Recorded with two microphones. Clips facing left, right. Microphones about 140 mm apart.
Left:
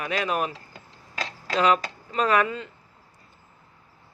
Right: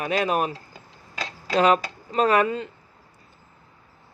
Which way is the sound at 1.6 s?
45° right (ahead or behind).